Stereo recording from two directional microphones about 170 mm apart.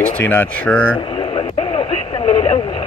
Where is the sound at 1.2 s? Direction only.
30° left (ahead or behind).